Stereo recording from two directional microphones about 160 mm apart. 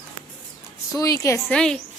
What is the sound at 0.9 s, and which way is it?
Speech, 20° left (ahead or behind).